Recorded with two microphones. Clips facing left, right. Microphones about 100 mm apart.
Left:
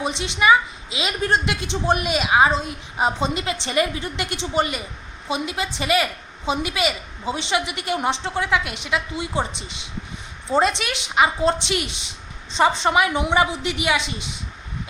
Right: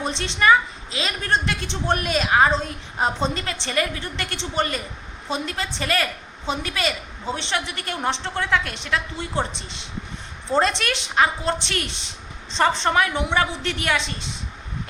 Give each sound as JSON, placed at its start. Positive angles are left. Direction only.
{"t": 0.0, "sound": "a woman's voice", "side_deg": 5}